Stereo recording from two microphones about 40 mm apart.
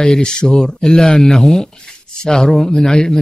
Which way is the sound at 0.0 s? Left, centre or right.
Centre.